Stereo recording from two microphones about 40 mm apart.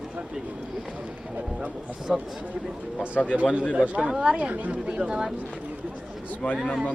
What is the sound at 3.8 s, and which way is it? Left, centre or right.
Speech, right.